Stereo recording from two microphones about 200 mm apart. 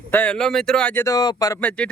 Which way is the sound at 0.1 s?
5° left (ahead or behind).